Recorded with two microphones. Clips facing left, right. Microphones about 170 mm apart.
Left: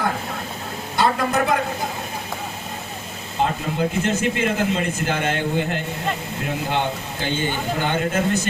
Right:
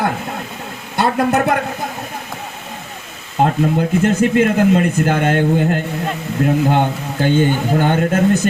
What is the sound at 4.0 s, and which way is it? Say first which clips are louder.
A man's voice: right 8 dB; 55° right (ahead or behind).